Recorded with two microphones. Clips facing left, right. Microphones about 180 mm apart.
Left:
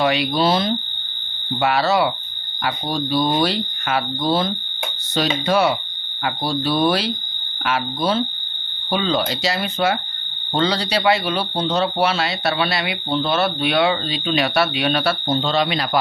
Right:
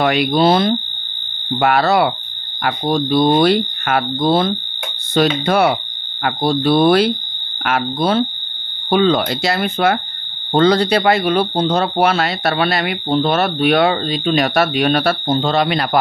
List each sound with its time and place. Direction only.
0.0 s speech: 55° right (ahead or behind)